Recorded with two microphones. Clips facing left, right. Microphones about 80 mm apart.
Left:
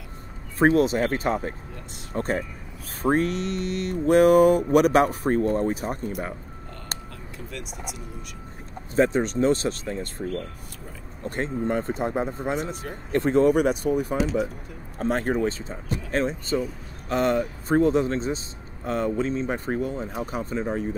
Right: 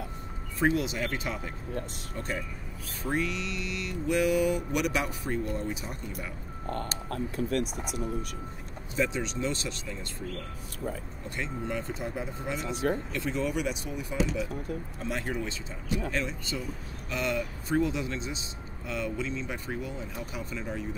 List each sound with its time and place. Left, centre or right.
0.6 s speech: left
2.1 s mantra: left
7.1 s speech: right
8.9 s mantra: left
11.2 s mantra: left
15.0 s speech: left